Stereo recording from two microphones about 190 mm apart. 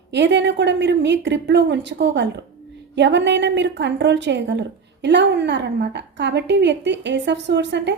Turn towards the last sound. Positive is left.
turn(degrees=-65)  # may be behind; listen again after turning